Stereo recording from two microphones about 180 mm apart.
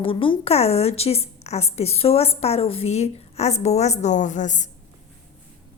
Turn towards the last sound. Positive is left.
turn(degrees=45)  # may be behind; listen again after turning